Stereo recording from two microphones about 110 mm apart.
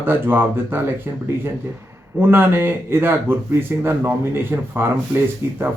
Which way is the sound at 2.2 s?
20° right (ahead or behind).